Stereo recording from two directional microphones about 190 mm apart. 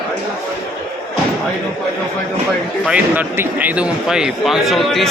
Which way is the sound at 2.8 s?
5° right (ahead or behind).